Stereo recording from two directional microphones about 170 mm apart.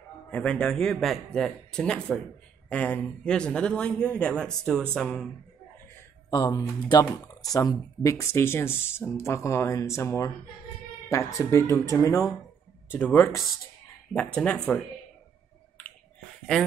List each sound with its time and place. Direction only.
0.3 s a man's voice: 5° left (ahead or behind)
6.3 s a man's voice: 25° left (ahead or behind); by 14.6 s 5° left (ahead or behind)
15.8 s finger snapping: 10° left (ahead or behind)